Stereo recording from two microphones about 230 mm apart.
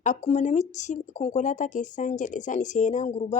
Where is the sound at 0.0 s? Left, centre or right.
Left.